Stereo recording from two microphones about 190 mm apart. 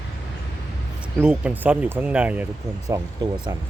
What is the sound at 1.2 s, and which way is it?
Speech, 5° right (ahead or behind).